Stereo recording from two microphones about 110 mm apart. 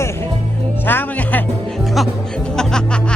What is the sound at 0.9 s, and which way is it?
Music, 15° left (ahead or behind).